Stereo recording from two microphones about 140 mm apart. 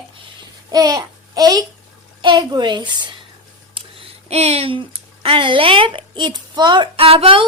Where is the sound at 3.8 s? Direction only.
40° right (ahead or behind).